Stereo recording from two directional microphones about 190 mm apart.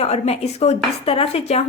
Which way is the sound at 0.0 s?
35° left (ahead or behind).